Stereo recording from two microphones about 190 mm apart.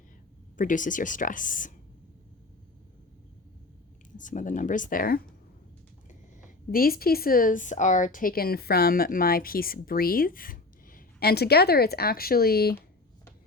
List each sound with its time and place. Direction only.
0.5 s a woman's voice: 45° left (ahead or behind)
4.2 s a woman's voice: 40° left (ahead or behind)
6.7 s a woman's voice: 50° left (ahead or behind)